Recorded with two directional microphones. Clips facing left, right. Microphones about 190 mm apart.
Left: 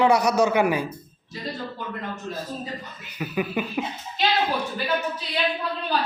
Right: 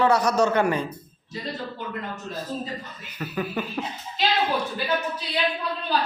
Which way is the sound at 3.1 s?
10° left (ahead or behind).